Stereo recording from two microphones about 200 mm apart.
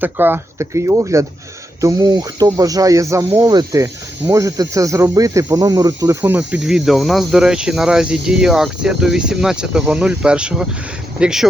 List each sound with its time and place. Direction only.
0.0 s speech: 10° right (ahead or behind)